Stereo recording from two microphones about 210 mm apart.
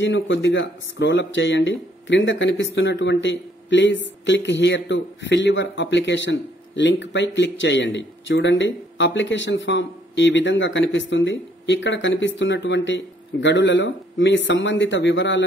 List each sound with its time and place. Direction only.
0.0 s speech: 60° left (ahead or behind)